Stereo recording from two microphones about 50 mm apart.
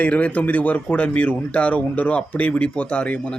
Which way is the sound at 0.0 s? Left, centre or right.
Left.